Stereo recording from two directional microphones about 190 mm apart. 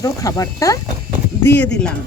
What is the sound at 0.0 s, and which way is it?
Speech, 20° left (ahead or behind).